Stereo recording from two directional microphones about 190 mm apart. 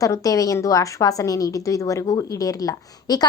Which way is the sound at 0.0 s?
15° left (ahead or behind).